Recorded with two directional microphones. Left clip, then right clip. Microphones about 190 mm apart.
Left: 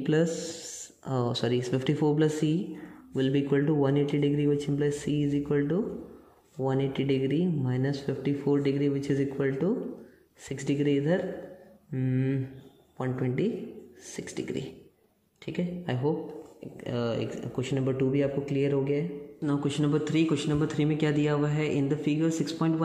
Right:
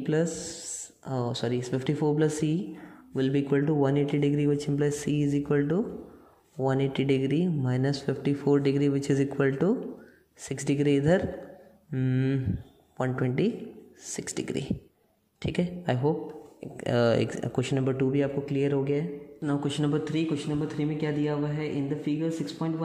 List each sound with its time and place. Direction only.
0.0 s speech: centre (ahead or behind); by 16.2 s 20° right (ahead or behind)
16.7 s speech: 35° right (ahead or behind); by 22.7 s 10° left (ahead or behind)